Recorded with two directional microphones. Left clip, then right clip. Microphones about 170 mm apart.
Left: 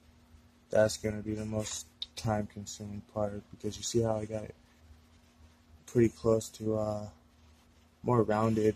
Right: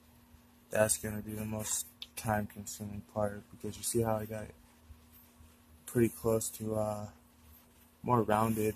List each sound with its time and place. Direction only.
0.7 s speech: 5° left (ahead or behind)
5.9 s speech: centre (ahead or behind)